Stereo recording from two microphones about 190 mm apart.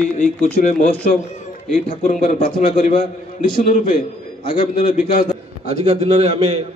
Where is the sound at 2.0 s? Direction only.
45° left (ahead or behind).